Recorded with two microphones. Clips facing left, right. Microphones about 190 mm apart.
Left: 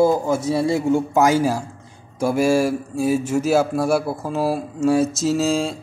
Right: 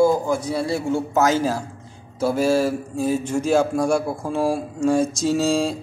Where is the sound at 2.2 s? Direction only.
10° left (ahead or behind).